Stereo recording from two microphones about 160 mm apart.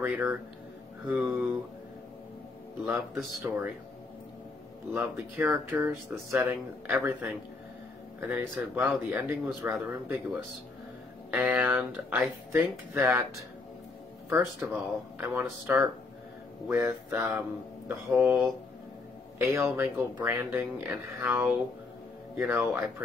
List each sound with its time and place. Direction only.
0.0 s speech: 10° right (ahead or behind)
2.8 s a man's voice: centre (ahead or behind)
3.4 s speech: 10° right (ahead or behind)
4.9 s speech: 10° right (ahead or behind)
11.2 s speech: 10° right (ahead or behind)